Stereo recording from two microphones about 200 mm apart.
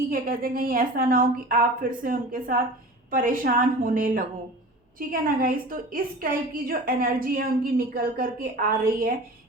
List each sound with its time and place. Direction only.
0.1 s a woman's voice: 45° right (ahead or behind)